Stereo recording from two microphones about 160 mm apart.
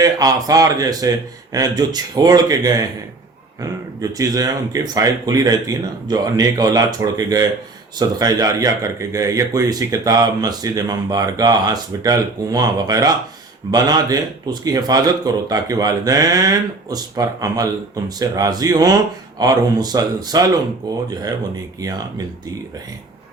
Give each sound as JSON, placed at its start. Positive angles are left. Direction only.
{"t": 0.0, "sound": "speech", "side_deg": -20}